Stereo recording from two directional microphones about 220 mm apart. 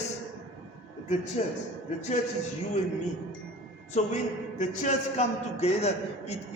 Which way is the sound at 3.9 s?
30° left (ahead or behind).